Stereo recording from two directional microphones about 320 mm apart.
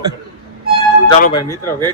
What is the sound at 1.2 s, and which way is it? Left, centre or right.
Speech, centre.